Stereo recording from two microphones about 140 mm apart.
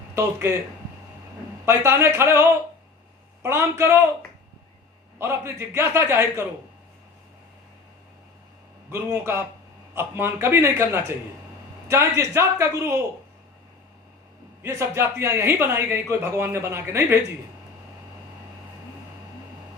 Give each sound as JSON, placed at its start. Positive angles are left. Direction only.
{"t": 0.2, "sound": "a man's voice", "side_deg": -20}
{"t": 1.6, "sound": "a man's voice", "side_deg": -20}
{"t": 5.2, "sound": "speech", "side_deg": -20}
{"t": 8.9, "sound": "a man's voice", "side_deg": -20}
{"t": 14.6, "sound": "speech", "side_deg": -20}